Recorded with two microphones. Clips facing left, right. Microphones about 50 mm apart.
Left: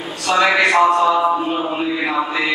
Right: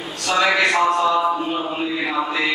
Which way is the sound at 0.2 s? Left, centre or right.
Centre.